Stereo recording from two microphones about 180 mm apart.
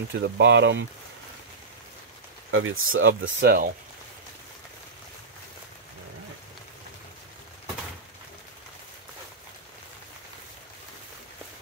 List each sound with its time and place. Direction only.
0.2 s speech: 80° right
2.5 s speech: 90° right; by 3.7 s 55° right (ahead or behind)